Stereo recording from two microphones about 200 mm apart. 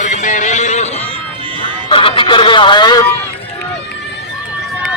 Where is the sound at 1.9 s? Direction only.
25° left (ahead or behind).